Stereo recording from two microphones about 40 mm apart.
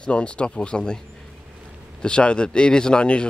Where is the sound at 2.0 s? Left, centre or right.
Left.